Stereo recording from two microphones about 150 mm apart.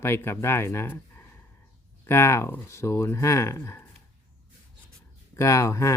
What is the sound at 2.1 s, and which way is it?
Speech, 15° left (ahead or behind).